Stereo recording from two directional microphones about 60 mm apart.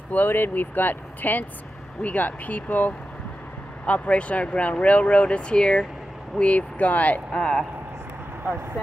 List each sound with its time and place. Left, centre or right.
0.1 s speech: left; by 7.6 s centre